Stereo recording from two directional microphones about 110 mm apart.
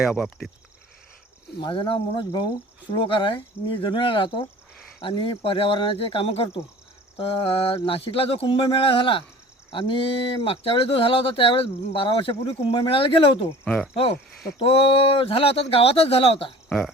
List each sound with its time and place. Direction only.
0.1 s speech: 5° left (ahead or behind)
1.6 s speech: 50° left (ahead or behind)
7.2 s a sound: 60° left (ahead or behind)
9.7 s speech: 50° left (ahead or behind)
14.6 s a sound: 55° left (ahead or behind)
16.6 s speech: centre (ahead or behind)